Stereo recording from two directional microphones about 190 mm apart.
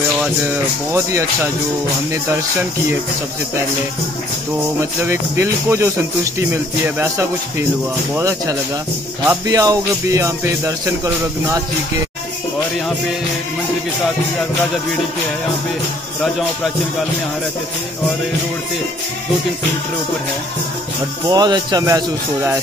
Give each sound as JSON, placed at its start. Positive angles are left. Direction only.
{"t": 0.2, "sound": "speech", "side_deg": -10}
{"t": 4.7, "sound": "speech", "side_deg": -15}
{"t": 21.3, "sound": "a man's voice", "side_deg": -20}